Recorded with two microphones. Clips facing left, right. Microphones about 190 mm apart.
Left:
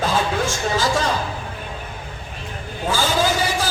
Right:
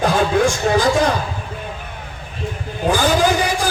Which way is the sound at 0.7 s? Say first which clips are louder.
Right 5 dB; 65° right (ahead or behind).